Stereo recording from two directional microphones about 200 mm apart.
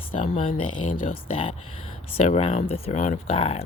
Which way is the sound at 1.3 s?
25° left (ahead or behind).